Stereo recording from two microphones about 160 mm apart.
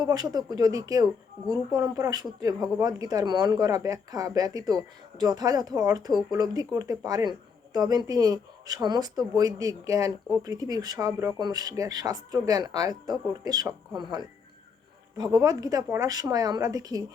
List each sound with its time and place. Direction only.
0.0 s speech: 25° right (ahead or behind)